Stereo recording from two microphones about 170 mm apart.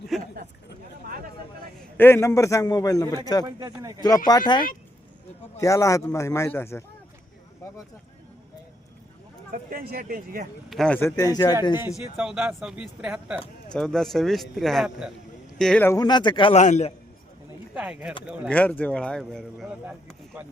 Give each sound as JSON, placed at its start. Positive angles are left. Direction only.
{"t": 0.1, "sound": "a sound", "side_deg": 0}
{"t": 2.0, "sound": "a man's voice", "side_deg": 15}
{"t": 3.7, "sound": "speech", "side_deg": -20}
{"t": 4.3, "sound": "a man's voice", "side_deg": 25}
{"t": 9.5, "sound": "speech", "side_deg": -55}
{"t": 10.7, "sound": "speech", "side_deg": 5}
{"t": 11.2, "sound": "a man's voice", "side_deg": 20}
{"t": 12.1, "sound": "a man's voice", "side_deg": -5}
{"t": 16.0, "sound": "a man's voice", "side_deg": 25}
{"t": 16.6, "sound": "a man's voice", "side_deg": 45}
{"t": 17.7, "sound": "speech", "side_deg": -5}
{"t": 18.4, "sound": "speech", "side_deg": 10}